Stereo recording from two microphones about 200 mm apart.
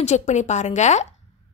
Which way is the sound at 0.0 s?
35° left (ahead or behind).